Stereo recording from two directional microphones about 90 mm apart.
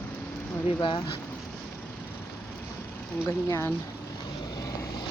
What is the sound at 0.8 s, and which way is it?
Speech, 60° left (ahead or behind).